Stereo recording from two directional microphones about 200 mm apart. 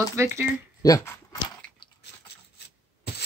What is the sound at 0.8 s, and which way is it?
Speech, 15° left (ahead or behind).